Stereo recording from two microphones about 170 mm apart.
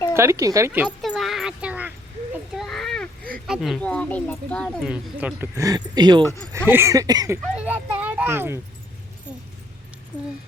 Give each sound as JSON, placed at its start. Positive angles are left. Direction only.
{"t": 0.1, "sound": "a sound", "side_deg": -15}
{"t": 3.4, "sound": "speech", "side_deg": 0}
{"t": 4.8, "sound": "speech", "side_deg": -5}
{"t": 6.7, "sound": "speech", "side_deg": -15}
{"t": 7.5, "sound": "speech", "side_deg": -10}